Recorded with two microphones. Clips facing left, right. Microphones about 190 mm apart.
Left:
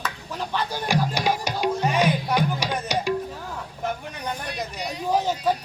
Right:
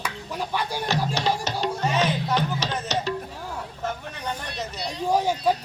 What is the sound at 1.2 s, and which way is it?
Music, 10° left (ahead or behind).